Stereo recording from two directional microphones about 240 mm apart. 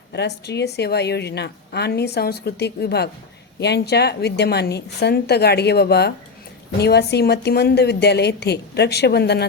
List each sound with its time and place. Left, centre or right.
0.1 s a woman's voice: left